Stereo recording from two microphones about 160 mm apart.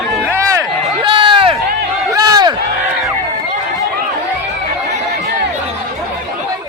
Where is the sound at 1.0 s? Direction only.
30° right (ahead or behind).